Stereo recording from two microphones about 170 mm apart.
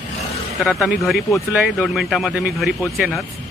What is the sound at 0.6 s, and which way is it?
Speech, centre (ahead or behind).